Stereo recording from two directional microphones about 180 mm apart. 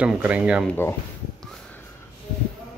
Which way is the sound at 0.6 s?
15° left (ahead or behind).